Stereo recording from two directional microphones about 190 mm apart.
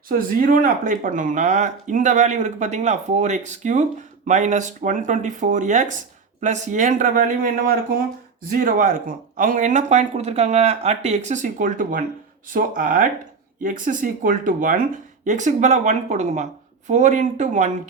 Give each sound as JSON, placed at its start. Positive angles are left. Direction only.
{"t": 0.1, "sound": "speech", "side_deg": -45}